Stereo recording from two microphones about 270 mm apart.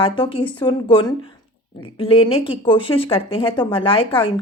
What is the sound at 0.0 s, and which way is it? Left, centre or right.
Speech, centre.